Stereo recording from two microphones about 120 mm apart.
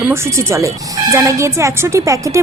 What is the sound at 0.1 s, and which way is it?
A woman's voice, 25° right (ahead or behind).